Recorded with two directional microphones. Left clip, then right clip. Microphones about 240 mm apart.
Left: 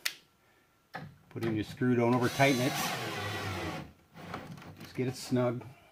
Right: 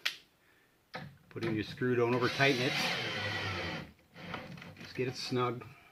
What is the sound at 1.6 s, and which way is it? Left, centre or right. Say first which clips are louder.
Speech: left 1 dB; left.